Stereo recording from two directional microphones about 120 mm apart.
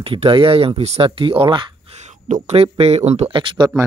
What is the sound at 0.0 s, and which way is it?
Speech, 50° right (ahead or behind).